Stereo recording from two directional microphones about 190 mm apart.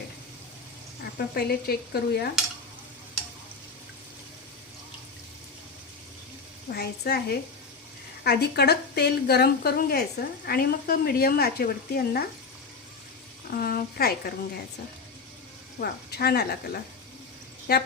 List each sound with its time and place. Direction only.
1.0 s a woman's voice: 55° left (ahead or behind)
6.7 s a woman's voice: 55° left (ahead or behind)
13.5 s a woman's voice: 55° left (ahead or behind)
15.8 s a woman's voice: 55° left (ahead or behind)